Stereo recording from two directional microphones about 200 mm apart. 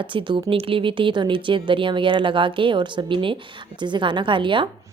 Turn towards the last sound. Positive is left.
turn(degrees=-25)  # may be behind; listen again after turning